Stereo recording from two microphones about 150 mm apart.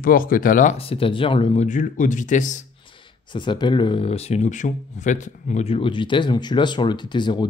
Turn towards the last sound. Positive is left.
turn(degrees=30)  # may be behind; listen again after turning